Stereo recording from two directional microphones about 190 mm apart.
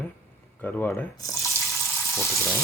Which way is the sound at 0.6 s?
10° left (ahead or behind).